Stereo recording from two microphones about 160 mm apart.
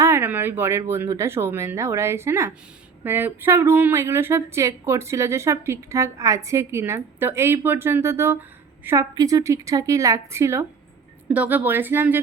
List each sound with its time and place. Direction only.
0.0 s a woman's voice: 15° right (ahead or behind)